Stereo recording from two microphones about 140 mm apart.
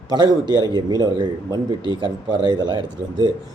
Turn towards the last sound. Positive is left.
turn(degrees=-30)  # may be behind; listen again after turning